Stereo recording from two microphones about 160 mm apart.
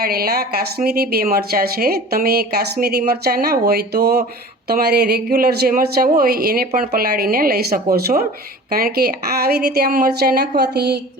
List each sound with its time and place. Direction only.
0.0 s a woman's voice: 70° right (ahead or behind); by 11.0 s 90° right